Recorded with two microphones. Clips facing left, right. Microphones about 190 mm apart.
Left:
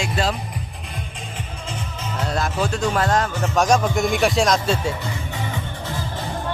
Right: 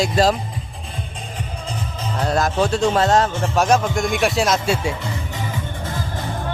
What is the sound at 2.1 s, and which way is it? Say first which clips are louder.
Music: right 5 dB; 35° right (ahead or behind).